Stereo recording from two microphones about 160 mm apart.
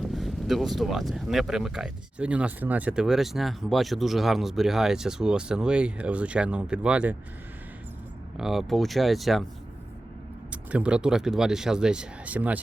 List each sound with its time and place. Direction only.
0.0 s speech: centre (ahead or behind)
8.4 s speech: centre (ahead or behind)
10.5 s speech: 10° right (ahead or behind)